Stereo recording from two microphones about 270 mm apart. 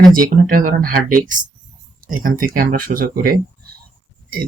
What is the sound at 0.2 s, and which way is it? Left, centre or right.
Speech, right.